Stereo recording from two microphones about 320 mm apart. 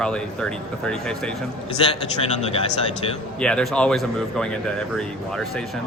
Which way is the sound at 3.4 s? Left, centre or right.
Centre.